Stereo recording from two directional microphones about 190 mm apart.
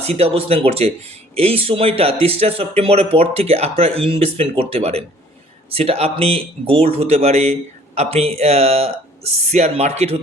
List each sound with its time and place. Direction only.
0.0 s speech: 35° right (ahead or behind)